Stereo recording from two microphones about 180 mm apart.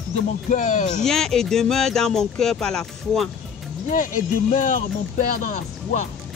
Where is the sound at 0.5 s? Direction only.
45° left (ahead or behind).